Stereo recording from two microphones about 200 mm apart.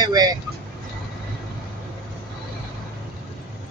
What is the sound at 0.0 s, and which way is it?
Vehicle, 20° right (ahead or behind).